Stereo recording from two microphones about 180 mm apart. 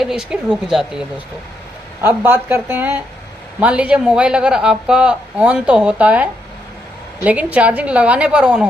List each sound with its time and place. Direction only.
0.0 s speech: 5° right (ahead or behind)
7.3 s speech: 10° right (ahead or behind)